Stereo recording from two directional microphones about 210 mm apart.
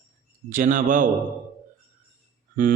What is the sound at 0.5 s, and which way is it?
Speech, 40° right (ahead or behind).